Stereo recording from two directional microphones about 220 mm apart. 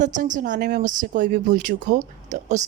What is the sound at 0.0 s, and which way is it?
A woman's voice, 35° right (ahead or behind).